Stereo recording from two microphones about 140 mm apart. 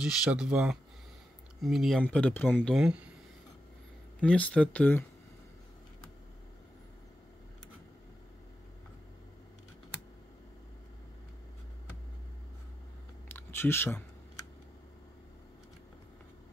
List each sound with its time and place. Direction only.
0.0 s speech: 5° right (ahead or behind)
2.0 s speech: 10° left (ahead or behind)
2.7 s speech: 5° right (ahead or behind)
4.2 s speech: 10° left (ahead or behind)
13.3 s a sound: 15° left (ahead or behind)